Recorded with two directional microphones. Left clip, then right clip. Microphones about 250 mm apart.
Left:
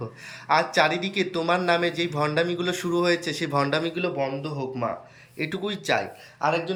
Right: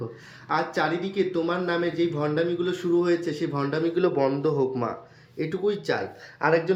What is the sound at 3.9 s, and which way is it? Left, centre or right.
Speech, centre.